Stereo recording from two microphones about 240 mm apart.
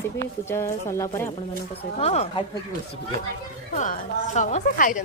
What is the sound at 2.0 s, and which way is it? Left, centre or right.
Speech, left.